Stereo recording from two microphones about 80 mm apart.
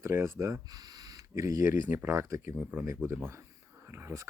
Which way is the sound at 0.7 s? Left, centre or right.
Right.